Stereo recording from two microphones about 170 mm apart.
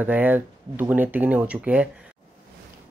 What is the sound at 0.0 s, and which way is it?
Speech, 10° right (ahead or behind).